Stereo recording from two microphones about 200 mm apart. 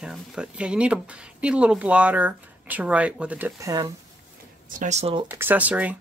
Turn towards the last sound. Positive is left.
turn(degrees=-5)  # may be behind; listen again after turning